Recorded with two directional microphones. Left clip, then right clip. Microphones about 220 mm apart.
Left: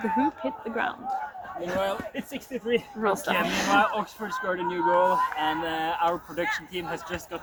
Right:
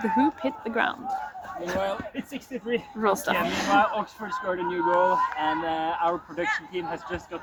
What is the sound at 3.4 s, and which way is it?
Speech, 40° left (ahead or behind).